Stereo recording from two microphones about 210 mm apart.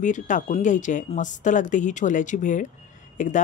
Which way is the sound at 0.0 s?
35° left (ahead or behind).